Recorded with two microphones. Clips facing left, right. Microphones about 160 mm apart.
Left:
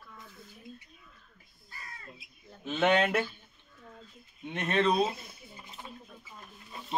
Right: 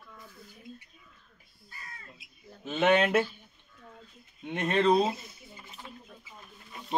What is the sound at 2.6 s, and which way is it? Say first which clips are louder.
Speech: right 2 dB; 5° right (ahead or behind).